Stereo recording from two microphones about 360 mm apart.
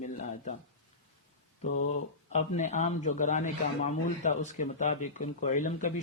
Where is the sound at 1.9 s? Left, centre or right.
Centre.